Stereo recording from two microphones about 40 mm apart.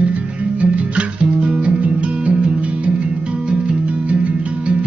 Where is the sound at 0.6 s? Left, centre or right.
Right.